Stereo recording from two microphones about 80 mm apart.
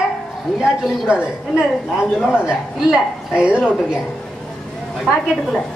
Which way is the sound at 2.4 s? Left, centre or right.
Centre.